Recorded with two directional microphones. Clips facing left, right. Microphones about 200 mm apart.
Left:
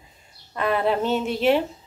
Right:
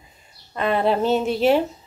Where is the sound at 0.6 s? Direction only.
25° right (ahead or behind).